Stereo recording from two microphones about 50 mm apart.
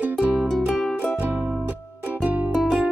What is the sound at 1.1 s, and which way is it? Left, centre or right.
Music, right.